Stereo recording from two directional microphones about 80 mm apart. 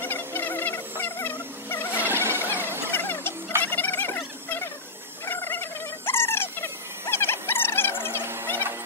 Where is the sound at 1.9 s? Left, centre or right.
Right.